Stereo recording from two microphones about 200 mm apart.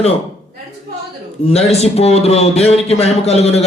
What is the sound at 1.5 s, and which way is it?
A man's voice, 30° left (ahead or behind).